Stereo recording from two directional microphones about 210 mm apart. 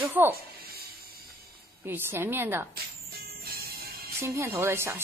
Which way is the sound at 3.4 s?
45° right (ahead or behind).